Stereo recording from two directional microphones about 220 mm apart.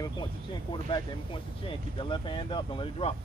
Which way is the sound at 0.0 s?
20° left (ahead or behind).